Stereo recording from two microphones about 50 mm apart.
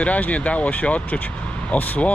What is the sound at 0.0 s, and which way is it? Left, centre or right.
Speech, left.